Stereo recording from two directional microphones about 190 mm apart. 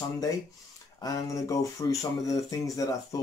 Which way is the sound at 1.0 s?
20° left (ahead or behind).